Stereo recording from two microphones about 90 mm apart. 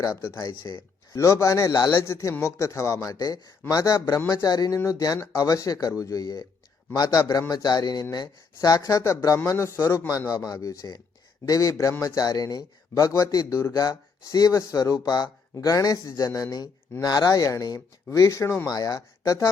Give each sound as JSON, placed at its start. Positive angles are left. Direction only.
{"t": 0.2, "sound": "a man's voice", "side_deg": 30}
{"t": 1.7, "sound": "speech", "side_deg": 50}
{"t": 2.0, "sound": "a man's voice", "side_deg": 35}
{"t": 10.1, "sound": "a man's voice", "side_deg": 45}